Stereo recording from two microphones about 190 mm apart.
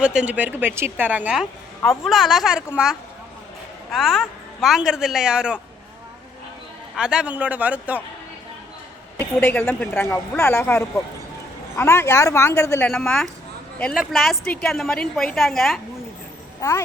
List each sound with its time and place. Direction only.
0.0 s a woman's voice: 5° right (ahead or behind)
6.9 s a man's voice: 5° right (ahead or behind)
9.1 s a woman's voice: 10° left (ahead or behind)
12.9 s a woman's voice: 5° left (ahead or behind)
16.6 s a child's voice: 15° left (ahead or behind)